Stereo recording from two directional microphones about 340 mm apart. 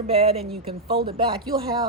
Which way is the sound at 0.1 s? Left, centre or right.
Centre.